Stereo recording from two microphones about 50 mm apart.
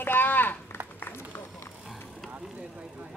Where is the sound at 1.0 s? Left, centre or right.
Left.